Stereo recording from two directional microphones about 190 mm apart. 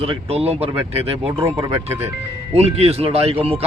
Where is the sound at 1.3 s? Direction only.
15° right (ahead or behind).